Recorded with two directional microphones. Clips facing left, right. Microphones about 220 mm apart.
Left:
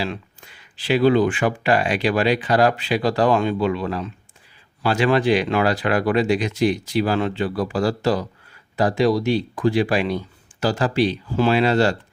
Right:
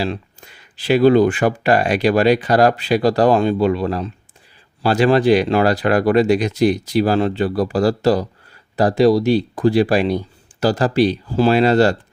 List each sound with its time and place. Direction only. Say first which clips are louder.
0.0 s speech: right 4 dB; 40° right (ahead or behind)